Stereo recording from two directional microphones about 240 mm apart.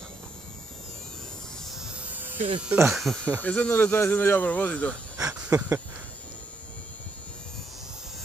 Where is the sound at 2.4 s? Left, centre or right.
Right.